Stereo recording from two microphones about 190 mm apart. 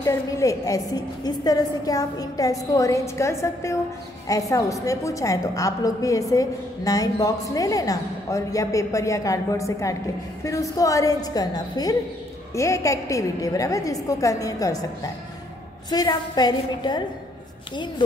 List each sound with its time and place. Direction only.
0.0 s a woman's voice: 15° left (ahead or behind)
15.9 s a woman's voice: 20° left (ahead or behind)